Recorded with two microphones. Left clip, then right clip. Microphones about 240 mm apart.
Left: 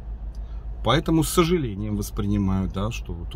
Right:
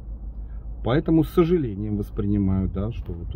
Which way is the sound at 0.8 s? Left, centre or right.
Centre.